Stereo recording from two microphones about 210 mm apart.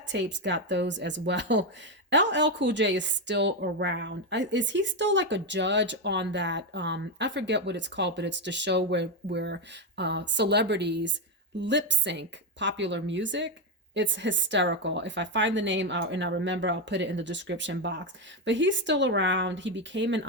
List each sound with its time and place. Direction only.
0.1 s a woman's voice: 55° right (ahead or behind)